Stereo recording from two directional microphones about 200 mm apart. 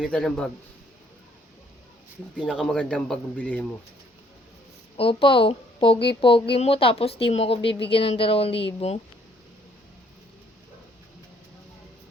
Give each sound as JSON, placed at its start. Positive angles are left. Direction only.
{"t": 0.0, "sound": "a man's voice", "side_deg": 5}
{"t": 2.4, "sound": "a man's voice", "side_deg": 0}
{"t": 4.9, "sound": "a woman's voice", "side_deg": 25}